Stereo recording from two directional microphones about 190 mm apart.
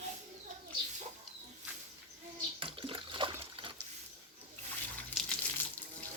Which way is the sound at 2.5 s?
30° right (ahead or behind).